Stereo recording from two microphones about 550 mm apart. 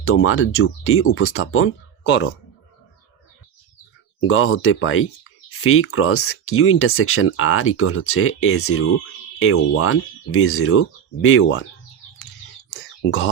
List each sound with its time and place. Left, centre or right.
0.0 s speech: left
4.2 s speech: left
12.7 s a sound: left